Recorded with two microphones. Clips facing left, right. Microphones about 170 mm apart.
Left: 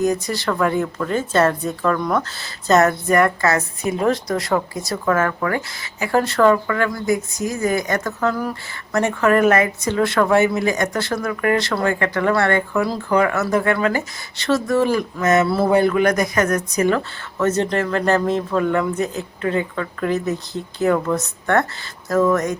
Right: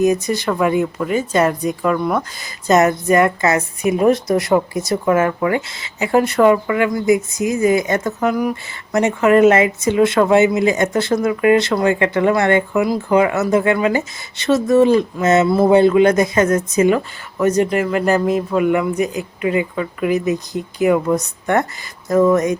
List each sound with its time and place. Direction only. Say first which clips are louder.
0.0 s speech: right 4 dB; 20° right (ahead or behind)